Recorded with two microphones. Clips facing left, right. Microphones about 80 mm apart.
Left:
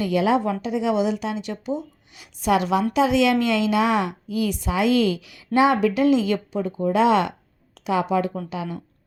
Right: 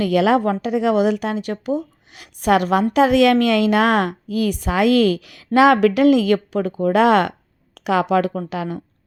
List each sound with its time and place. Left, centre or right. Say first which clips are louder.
0.0 s a woman's voice: right 4 dB; right
5.5 s a woman's voice: right 5 dB; right